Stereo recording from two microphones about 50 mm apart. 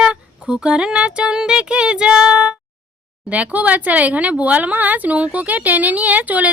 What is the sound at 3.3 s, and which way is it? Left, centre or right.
Speech, right.